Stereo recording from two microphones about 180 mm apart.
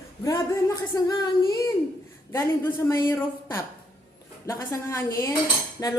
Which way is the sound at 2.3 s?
15° left (ahead or behind).